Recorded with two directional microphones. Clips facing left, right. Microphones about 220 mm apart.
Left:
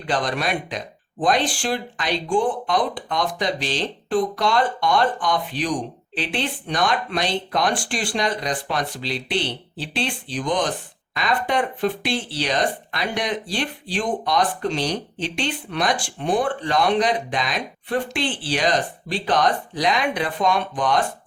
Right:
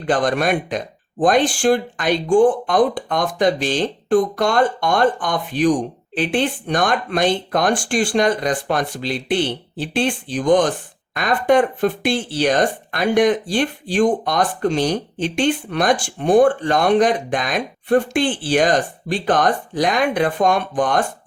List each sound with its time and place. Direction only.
0.0 s speech: 50° right (ahead or behind)